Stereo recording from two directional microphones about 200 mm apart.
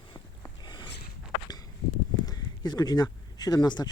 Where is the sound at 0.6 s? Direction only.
20° left (ahead or behind).